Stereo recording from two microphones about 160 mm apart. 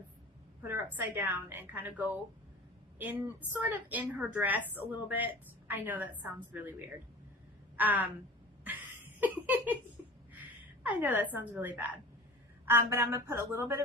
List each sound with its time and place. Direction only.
0.7 s a woman's voice: 10° right (ahead or behind)
9.2 s a sound: 10° right (ahead or behind)
10.8 s a woman's voice: 10° right (ahead or behind)